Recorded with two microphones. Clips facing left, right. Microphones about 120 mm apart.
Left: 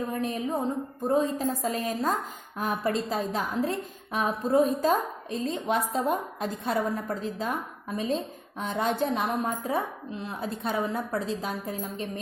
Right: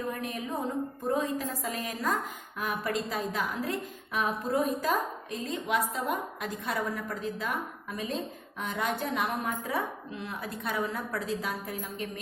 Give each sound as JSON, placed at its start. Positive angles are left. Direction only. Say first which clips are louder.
{"t": 0.1, "sound": "a woman's voice", "louder": "left 5 dB", "side_deg": 30}